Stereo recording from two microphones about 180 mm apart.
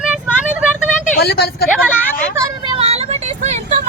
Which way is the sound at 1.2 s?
65° left (ahead or behind).